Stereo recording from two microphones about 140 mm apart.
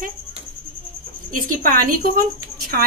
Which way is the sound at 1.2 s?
75° right (ahead or behind).